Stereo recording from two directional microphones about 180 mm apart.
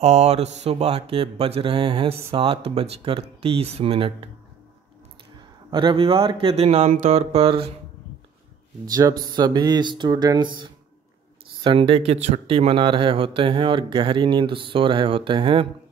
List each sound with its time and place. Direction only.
0.0 s speech: 35° right (ahead or behind)
5.7 s speech: 25° right (ahead or behind)
9.3 s speech: 25° right (ahead or behind)